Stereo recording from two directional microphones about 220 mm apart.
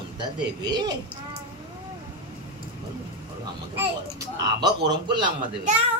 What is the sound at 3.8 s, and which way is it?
A child's voice, 20° right (ahead or behind).